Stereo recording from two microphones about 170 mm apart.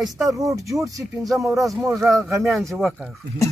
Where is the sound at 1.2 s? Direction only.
Centre (ahead or behind).